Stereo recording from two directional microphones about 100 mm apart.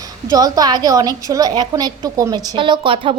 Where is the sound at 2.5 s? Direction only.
55° right (ahead or behind).